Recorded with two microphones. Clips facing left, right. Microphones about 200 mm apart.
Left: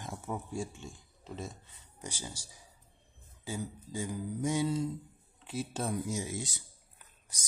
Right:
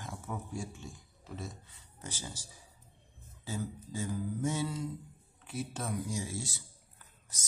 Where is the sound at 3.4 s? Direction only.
15° left (ahead or behind).